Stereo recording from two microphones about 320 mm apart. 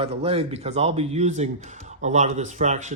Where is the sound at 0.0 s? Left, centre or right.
Centre.